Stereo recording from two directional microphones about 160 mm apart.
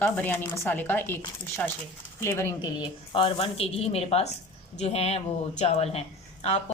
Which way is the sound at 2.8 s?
30° left (ahead or behind).